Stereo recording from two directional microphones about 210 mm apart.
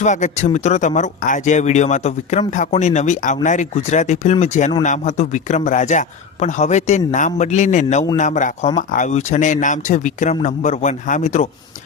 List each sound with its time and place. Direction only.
0.0 s a man's voice: 35° left (ahead or behind)